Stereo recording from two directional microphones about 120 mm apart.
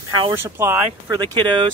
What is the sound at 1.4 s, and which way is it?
Speech, 40° right (ahead or behind).